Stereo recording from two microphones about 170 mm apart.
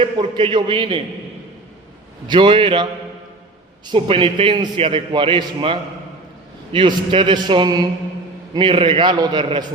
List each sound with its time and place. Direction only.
0.0 s a man's voice: 30° right (ahead or behind)
2.2 s a man's voice: 30° right (ahead or behind)
3.8 s a man's voice: 30° right (ahead or behind)